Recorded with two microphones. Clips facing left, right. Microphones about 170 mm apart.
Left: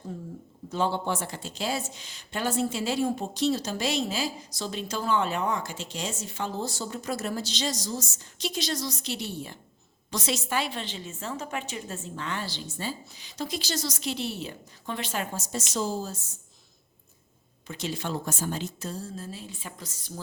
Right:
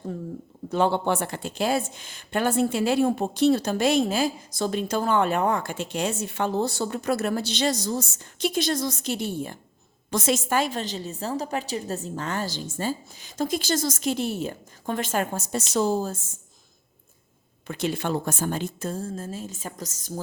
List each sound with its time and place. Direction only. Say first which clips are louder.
0.7 s a woman's voice: right 5 dB; 60° right (ahead or behind)
17.7 s a woman's voice: right 6 dB; 60° right (ahead or behind)